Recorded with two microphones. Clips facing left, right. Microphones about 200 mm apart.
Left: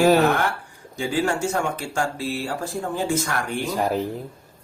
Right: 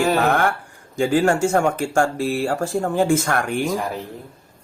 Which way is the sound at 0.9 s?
45° right (ahead or behind).